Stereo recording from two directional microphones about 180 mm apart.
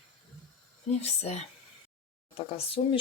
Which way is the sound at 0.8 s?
35° left (ahead or behind).